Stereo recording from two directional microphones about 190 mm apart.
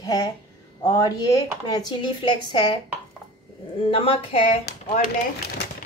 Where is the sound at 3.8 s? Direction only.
30° left (ahead or behind).